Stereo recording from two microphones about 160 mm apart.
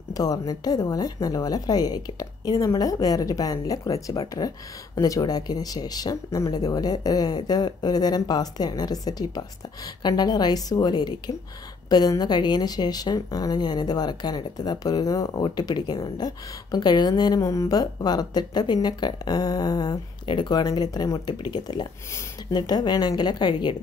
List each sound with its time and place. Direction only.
0.1 s a woman's voice: 25° left (ahead or behind)